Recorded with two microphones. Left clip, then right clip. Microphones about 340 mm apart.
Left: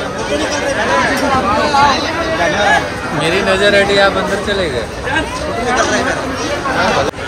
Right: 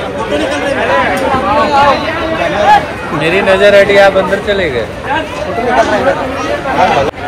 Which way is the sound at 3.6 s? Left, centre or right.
Centre.